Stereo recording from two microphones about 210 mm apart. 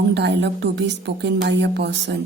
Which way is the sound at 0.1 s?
55° right (ahead or behind).